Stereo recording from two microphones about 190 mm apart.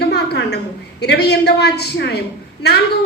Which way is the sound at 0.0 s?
60° left (ahead or behind).